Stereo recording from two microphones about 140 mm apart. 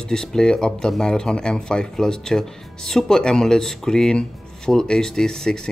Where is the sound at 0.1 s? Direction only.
5° left (ahead or behind).